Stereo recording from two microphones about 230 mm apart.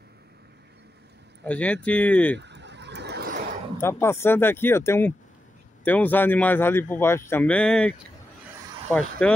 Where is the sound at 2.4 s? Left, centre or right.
Right.